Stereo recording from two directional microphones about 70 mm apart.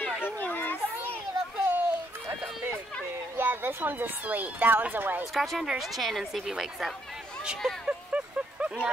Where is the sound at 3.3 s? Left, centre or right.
Right.